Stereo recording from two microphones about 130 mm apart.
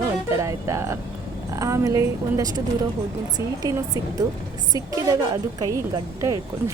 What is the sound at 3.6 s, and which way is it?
Speech, 30° right (ahead or behind).